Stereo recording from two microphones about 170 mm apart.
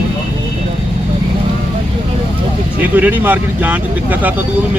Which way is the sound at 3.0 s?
10° right (ahead or behind).